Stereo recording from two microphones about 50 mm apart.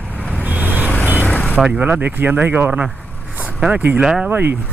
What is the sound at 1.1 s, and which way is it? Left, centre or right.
Vehicle, left.